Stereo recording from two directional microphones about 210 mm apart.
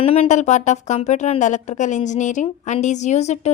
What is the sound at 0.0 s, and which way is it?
Speech, 30° left (ahead or behind).